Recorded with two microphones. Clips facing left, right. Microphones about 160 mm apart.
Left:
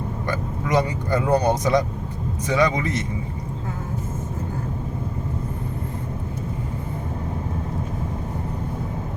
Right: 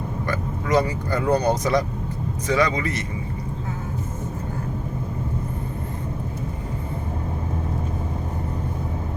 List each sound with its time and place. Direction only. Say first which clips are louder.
0.3 s vehicle: right 1 dB; 20° left (ahead or behind)
2.5 s a man's voice: left 1 dB; 20° left (ahead or behind)